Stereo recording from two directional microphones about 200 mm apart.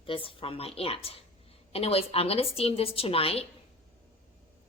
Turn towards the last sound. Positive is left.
turn(degrees=30)  # may be behind; listen again after turning